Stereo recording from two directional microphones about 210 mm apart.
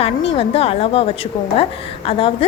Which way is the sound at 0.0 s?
25° left (ahead or behind).